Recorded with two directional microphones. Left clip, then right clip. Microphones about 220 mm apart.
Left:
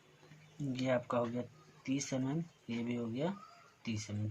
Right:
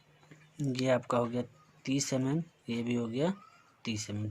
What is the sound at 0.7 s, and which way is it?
Speech, 45° right (ahead or behind).